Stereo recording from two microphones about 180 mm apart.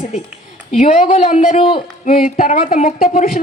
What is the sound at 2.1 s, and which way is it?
A woman's voice, 50° left (ahead or behind).